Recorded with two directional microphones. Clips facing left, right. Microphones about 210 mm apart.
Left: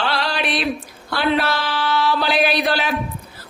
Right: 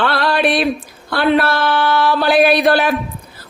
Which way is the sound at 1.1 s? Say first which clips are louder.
Right 5 dB; 55° right (ahead or behind).